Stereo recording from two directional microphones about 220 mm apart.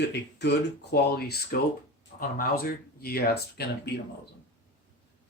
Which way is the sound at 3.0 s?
45° left (ahead or behind).